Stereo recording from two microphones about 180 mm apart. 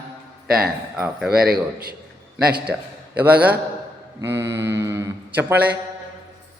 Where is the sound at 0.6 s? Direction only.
5° right (ahead or behind).